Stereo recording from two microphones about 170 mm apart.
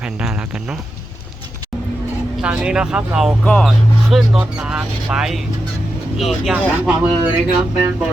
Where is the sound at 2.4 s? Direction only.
5° right (ahead or behind).